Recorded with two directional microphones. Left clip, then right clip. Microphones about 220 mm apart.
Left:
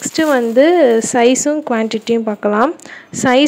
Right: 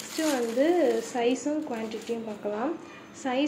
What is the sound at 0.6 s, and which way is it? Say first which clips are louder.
A woman's voice: left 14 dB; 45° left (ahead or behind).